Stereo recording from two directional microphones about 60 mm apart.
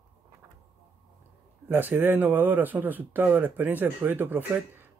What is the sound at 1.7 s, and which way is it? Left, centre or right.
Speech, right.